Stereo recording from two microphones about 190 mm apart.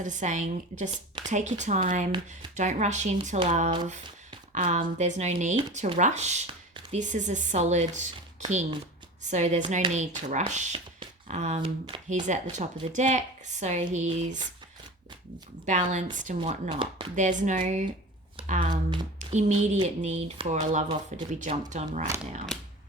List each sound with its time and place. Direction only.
0.0 s speech: 40° right (ahead or behind)
9.2 s speech: 35° right (ahead or behind)
15.6 s speech: 40° right (ahead or behind)
16.6 s speech: 25° right (ahead or behind)
17.2 s speech: 40° right (ahead or behind)
18.3 s a sound: 35° right (ahead or behind)
19.3 s speech: 40° right (ahead or behind)
22.5 s a sound: centre (ahead or behind)